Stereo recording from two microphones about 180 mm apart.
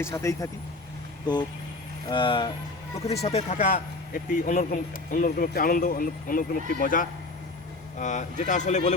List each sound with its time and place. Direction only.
0.0 s speech: 15° left (ahead or behind)
2.0 s speech: 25° left (ahead or behind)